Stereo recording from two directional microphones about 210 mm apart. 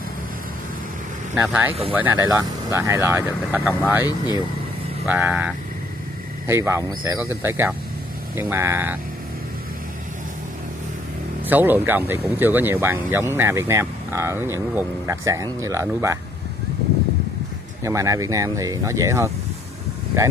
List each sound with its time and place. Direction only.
1.3 s speech: 5° right (ahead or behind)
11.4 s speech: 10° right (ahead or behind)
17.8 s speech: 15° right (ahead or behind)